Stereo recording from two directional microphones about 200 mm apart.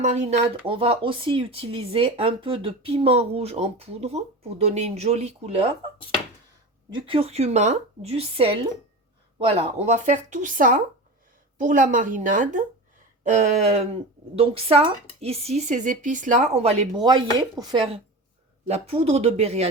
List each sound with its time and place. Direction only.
0.0 s a woman's voice: 35° right (ahead or behind)
6.9 s a woman's voice: 25° right (ahead or behind)